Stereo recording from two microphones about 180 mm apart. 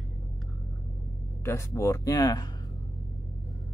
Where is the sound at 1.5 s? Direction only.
15° left (ahead or behind).